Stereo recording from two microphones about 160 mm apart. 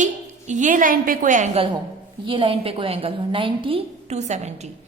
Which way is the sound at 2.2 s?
35° right (ahead or behind).